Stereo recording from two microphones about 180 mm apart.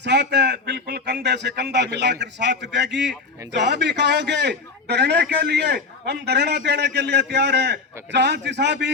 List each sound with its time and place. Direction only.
0.0 s a man's voice: 70° right (ahead or behind)